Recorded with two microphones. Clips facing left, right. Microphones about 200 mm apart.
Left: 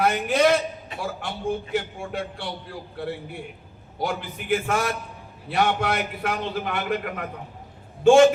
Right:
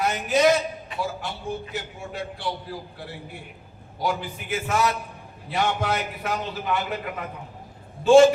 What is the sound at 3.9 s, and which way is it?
A man's voice, 60° left (ahead or behind).